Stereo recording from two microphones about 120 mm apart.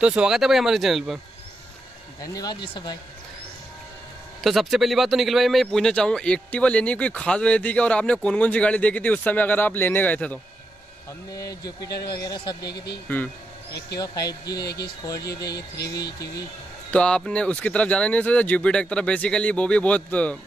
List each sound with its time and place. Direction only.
0.0 s speech: 5° right (ahead or behind)
2.2 s speech: 35° left (ahead or behind)
4.4 s a man's voice: centre (ahead or behind)
11.3 s speech: 30° left (ahead or behind)
13.9 s speech: 30° left (ahead or behind)
16.9 s a man's voice: 5° left (ahead or behind)